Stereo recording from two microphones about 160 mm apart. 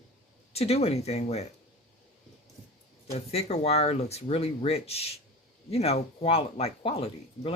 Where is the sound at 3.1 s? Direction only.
40° left (ahead or behind).